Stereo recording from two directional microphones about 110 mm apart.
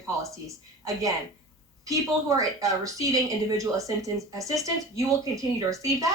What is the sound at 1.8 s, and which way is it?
Speech, 30° right (ahead or behind).